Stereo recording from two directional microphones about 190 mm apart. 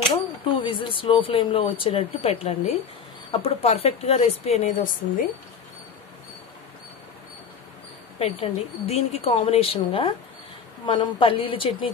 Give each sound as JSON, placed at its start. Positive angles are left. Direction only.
{"t": 0.1, "sound": "a woman's voice", "side_deg": 25}
{"t": 8.2, "sound": "a woman's voice", "side_deg": 30}